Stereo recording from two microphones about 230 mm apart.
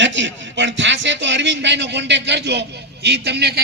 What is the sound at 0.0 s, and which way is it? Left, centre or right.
A man's voice, right.